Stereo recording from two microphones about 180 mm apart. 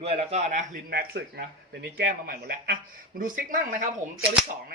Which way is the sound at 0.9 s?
65° right (ahead or behind).